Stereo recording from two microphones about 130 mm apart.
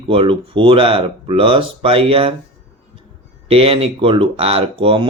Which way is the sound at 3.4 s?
45° right (ahead or behind).